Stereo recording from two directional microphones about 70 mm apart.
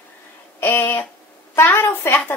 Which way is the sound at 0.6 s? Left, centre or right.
Left.